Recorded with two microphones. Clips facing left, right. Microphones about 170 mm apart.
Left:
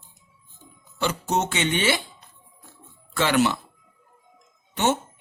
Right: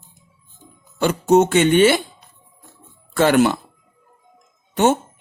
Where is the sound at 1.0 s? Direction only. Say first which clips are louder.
Right 10 dB; 50° right (ahead or behind).